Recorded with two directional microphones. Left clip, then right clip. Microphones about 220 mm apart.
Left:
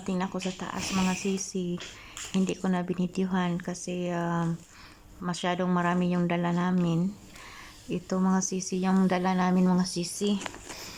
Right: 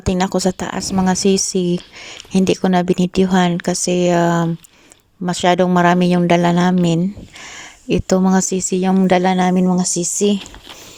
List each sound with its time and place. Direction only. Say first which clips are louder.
0.0 s speech: right 15 dB; 40° right (ahead or behind)